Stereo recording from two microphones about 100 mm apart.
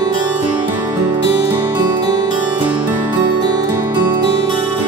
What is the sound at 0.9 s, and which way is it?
Music, 45° right (ahead or behind).